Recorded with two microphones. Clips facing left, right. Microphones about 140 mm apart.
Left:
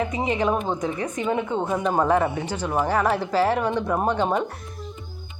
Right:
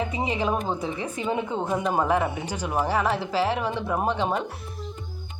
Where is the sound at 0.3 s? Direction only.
Centre (ahead or behind).